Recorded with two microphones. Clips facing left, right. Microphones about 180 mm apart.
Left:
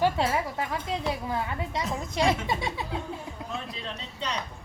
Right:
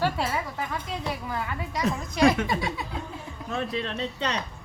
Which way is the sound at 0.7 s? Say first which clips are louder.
Left 2 dB; 25° left (ahead or behind).